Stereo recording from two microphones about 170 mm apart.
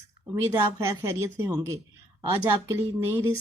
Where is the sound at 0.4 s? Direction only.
20° right (ahead or behind).